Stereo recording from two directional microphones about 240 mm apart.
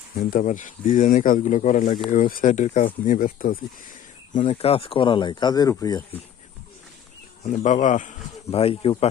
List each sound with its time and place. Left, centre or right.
0.2 s speech: left; by 6.0 s centre
7.4 s speech: left